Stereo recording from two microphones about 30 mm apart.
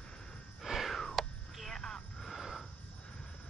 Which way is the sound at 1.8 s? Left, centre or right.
Left.